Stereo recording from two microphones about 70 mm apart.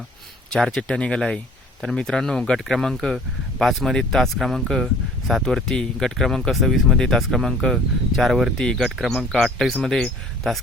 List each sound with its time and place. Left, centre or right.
0.5 s speech: centre
8.5 s speech: centre